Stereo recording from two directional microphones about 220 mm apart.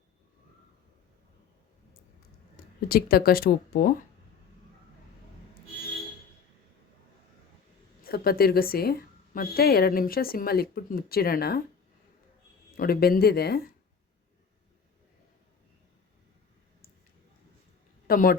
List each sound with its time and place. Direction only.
2.9 s a woman's voice: 45° left (ahead or behind)
8.0 s a woman's voice: 45° left (ahead or behind)
12.7 s a woman's voice: 45° left (ahead or behind)
18.1 s speech: 40° left (ahead or behind)